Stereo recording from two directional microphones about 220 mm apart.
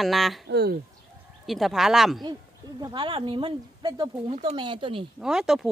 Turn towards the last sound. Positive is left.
turn(degrees=0)  # may be behind; listen again after turning